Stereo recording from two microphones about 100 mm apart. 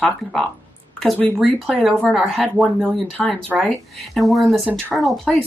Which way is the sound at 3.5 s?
Centre (ahead or behind).